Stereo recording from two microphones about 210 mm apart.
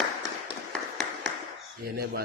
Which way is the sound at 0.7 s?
Centre (ahead or behind).